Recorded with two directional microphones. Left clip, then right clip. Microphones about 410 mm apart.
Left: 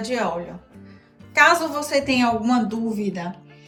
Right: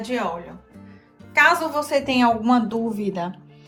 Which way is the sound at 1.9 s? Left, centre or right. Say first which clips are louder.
Right 1 dB; right.